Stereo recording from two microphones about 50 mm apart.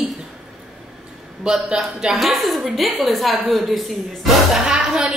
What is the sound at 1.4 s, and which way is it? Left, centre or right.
A woman's voice, centre.